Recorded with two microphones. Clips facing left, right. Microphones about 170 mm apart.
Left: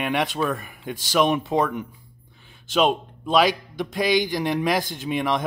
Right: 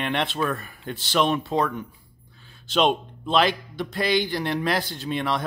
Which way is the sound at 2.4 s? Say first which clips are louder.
Left 1 dB; 15° left (ahead or behind).